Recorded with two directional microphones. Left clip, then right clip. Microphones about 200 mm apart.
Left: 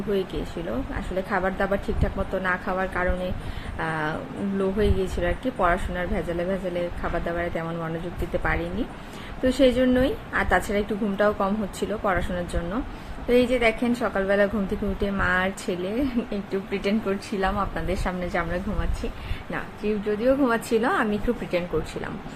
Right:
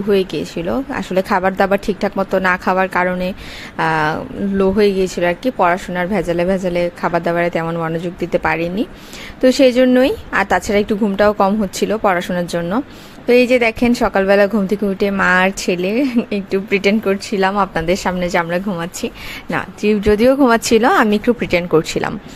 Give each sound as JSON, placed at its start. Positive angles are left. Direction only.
{"t": 0.1, "sound": "a woman's voice", "side_deg": -50}